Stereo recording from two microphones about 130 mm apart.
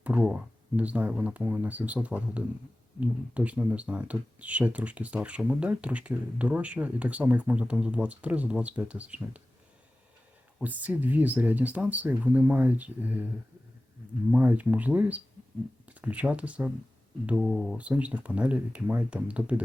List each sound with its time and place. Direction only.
0.0 s speech: 10° right (ahead or behind)
10.6 s speech: 10° right (ahead or behind)
14.3 s speech: 10° right (ahead or behind)